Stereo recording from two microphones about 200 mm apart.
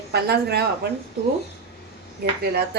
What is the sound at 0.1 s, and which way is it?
Speech, 55° right (ahead or behind).